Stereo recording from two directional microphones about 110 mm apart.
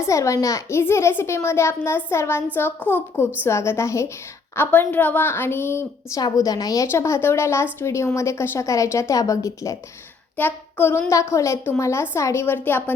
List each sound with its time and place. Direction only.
0.0 s a woman's voice: 30° left (ahead or behind)
10.3 s child singing: 20° left (ahead or behind)
11.1 s speech: 30° left (ahead or behind)